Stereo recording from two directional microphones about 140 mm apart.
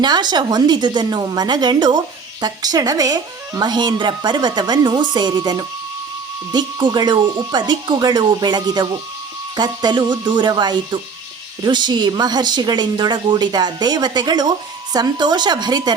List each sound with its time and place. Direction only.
0.0 s a woman's voice: 30° right (ahead or behind)